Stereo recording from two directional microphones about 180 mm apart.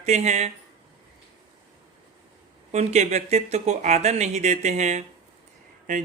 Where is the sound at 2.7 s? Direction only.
40° right (ahead or behind).